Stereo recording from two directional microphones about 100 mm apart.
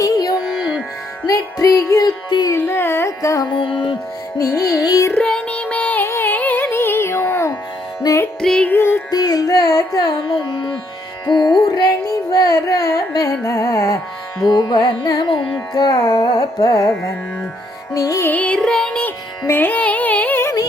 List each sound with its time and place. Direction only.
0.0 s music: 35° left (ahead or behind)
2.6 s music: 25° left (ahead or behind)
3.5 s music: 60° left (ahead or behind)
4.4 s music: 30° left (ahead or behind)
5.1 s music: 10° left (ahead or behind); by 8.3 s 30° left (ahead or behind)
8.4 s music: 5° left (ahead or behind)
8.7 s music: 20° left (ahead or behind)
9.0 s music: 40° left (ahead or behind)
11.3 s carnatic music: 45° left (ahead or behind)
11.7 s music: 40° left (ahead or behind)
15.7 s carnatic music: 40° left (ahead or behind)
16.6 s music: 35° left (ahead or behind)
17.9 s music: 35° left (ahead or behind)
18.3 s music: 15° left (ahead or behind)